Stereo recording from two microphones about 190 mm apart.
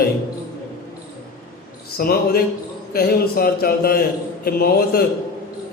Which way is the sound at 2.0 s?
50° left (ahead or behind).